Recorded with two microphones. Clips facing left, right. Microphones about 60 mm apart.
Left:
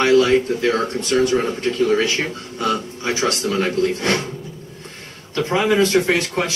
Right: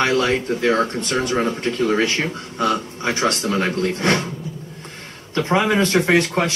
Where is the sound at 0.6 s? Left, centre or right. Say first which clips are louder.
Right 1 dB; right.